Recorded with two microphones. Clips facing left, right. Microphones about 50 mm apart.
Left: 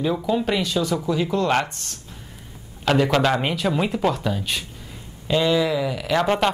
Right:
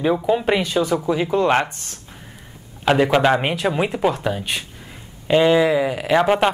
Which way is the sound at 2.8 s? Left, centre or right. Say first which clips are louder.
Right 3 dB; right.